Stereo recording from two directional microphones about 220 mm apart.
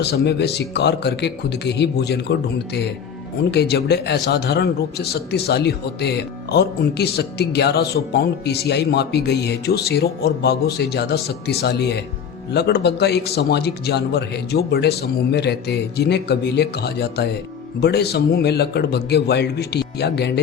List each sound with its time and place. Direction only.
0.0 s a man's voice: 50° left (ahead or behind)
3.5 s a man's voice: 45° left (ahead or behind)